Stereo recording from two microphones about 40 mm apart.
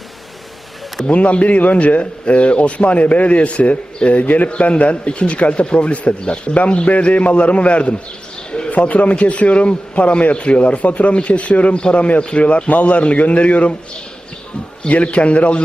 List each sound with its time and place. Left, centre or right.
1.0 s a man's voice: left
14.8 s speech: left